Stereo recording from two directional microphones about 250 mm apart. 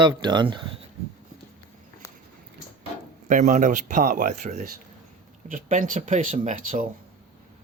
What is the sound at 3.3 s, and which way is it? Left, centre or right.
Speech, right.